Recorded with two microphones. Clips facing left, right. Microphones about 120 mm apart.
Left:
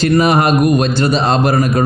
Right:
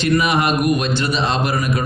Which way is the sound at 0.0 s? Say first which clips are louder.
Left 5 dB; 40° left (ahead or behind).